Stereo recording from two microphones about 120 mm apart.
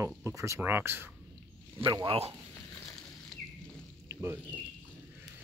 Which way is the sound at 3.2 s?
5° left (ahead or behind).